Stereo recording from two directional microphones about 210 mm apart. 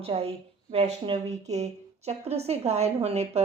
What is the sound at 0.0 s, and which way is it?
A woman's voice, 30° right (ahead or behind).